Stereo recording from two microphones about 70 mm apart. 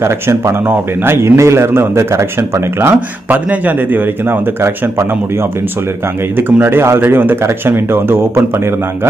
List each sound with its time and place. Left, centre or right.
0.0 s speech: right